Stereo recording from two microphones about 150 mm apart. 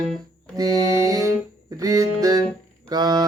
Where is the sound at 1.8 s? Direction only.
25° right (ahead or behind).